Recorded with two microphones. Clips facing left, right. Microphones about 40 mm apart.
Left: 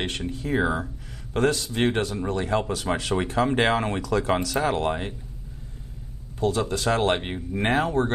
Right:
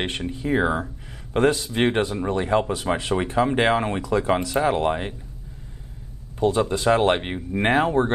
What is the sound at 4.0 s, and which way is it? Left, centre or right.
Speech, right.